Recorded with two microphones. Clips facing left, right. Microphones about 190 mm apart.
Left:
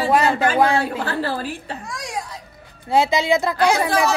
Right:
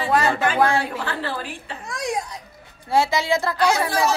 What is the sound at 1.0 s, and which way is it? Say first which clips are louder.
Speech: left 4 dB; 40° left (ahead or behind).